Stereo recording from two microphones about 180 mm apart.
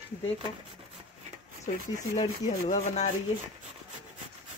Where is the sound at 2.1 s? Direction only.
40° left (ahead or behind).